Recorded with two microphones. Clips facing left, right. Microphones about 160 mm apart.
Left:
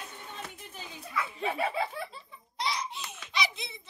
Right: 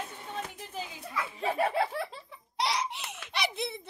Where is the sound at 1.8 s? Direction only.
75° right (ahead or behind).